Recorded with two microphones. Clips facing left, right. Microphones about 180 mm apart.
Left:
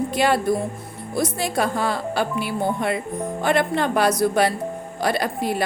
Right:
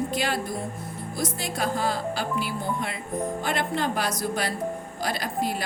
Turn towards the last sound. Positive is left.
turn(degrees=65)  # may be behind; listen again after turning